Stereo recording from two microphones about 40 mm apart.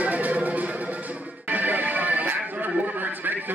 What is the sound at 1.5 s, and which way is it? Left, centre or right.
Music, right.